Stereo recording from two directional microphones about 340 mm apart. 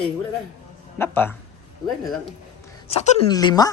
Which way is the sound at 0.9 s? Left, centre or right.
Centre.